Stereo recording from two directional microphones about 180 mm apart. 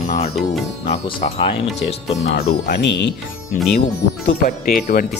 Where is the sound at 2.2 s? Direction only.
65° left (ahead or behind).